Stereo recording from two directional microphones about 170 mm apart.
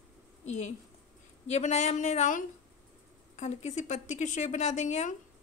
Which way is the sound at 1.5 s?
40° left (ahead or behind).